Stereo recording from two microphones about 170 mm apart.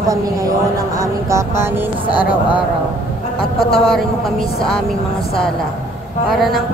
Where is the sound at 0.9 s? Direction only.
15° right (ahead or behind).